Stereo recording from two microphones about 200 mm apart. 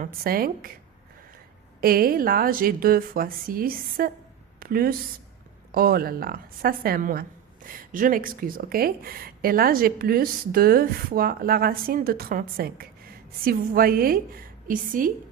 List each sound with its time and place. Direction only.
0.0 s a woman's voice: 45° right (ahead or behind)
1.8 s a woman's voice: 45° right (ahead or behind)